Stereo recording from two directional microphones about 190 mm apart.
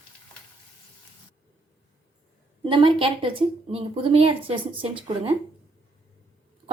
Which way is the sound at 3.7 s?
30° right (ahead or behind).